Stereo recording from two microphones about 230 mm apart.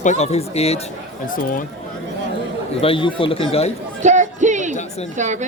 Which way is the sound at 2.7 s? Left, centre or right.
Left.